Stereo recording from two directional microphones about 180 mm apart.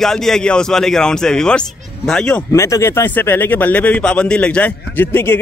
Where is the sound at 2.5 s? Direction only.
15° left (ahead or behind).